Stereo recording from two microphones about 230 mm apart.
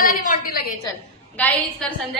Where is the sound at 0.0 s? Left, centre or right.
Left.